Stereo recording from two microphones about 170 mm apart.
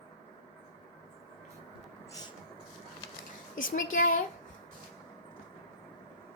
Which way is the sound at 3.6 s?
50° left (ahead or behind).